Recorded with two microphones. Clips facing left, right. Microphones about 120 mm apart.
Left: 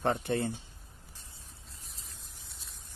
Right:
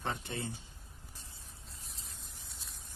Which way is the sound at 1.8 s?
Centre (ahead or behind).